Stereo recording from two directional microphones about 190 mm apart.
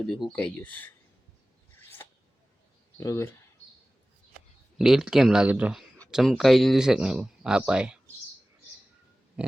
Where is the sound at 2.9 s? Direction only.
15° left (ahead or behind).